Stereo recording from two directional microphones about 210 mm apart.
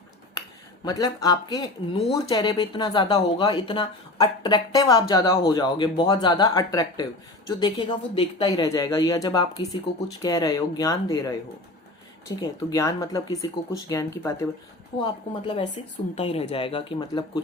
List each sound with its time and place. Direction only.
0.9 s speech: 15° left (ahead or behind)
12.4 s speech: 15° left (ahead or behind)
15.0 s speech: 25° left (ahead or behind)